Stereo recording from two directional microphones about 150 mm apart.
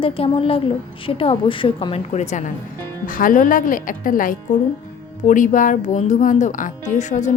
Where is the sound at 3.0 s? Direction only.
65° left (ahead or behind).